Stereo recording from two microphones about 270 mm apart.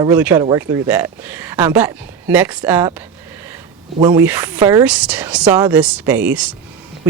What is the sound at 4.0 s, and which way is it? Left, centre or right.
Speech, centre.